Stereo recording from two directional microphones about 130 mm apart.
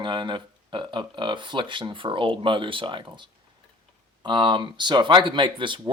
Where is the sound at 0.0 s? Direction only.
35° right (ahead or behind).